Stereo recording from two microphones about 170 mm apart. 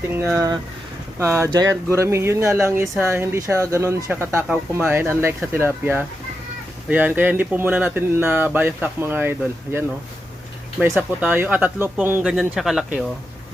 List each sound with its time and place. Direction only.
0.1 s speech: 10° right (ahead or behind)
10.8 s speech: 5° left (ahead or behind)
11.2 s speech: 10° right (ahead or behind)